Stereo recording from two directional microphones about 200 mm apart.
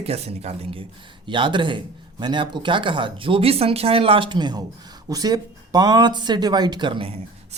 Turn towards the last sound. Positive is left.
turn(degrees=-30)  # may be behind; listen again after turning